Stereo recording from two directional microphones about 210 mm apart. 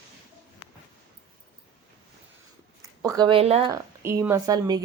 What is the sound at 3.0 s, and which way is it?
Speech, 20° right (ahead or behind).